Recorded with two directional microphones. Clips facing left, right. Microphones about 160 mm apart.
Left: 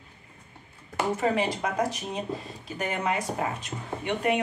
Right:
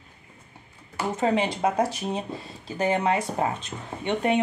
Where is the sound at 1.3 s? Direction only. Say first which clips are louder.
Right 3 dB; 25° right (ahead or behind).